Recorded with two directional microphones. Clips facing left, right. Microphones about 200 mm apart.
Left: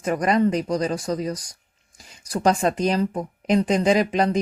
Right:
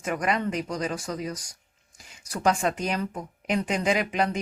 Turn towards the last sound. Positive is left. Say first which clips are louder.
# left 6 dB
turn(degrees=35)  # may be behind; listen again after turning